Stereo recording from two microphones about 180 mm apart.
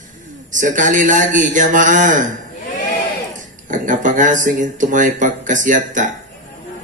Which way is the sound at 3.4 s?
45° right (ahead or behind).